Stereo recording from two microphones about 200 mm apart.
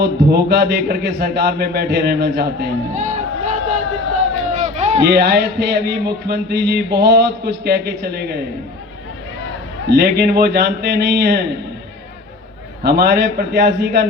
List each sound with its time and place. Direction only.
0.0 s speech: 55° right (ahead or behind)
2.9 s crowd: 40° right (ahead or behind)
4.5 s run: 35° right (ahead or behind)
5.0 s speech: 55° right (ahead or behind)
9.9 s a man's voice: 55° right (ahead or behind)
12.8 s a man's voice: 55° right (ahead or behind)